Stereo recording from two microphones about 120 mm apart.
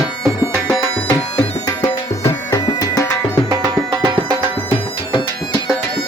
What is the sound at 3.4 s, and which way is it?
Music, 25° right (ahead or behind).